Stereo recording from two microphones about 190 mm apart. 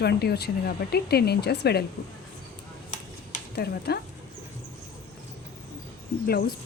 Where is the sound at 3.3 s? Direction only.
55° left (ahead or behind).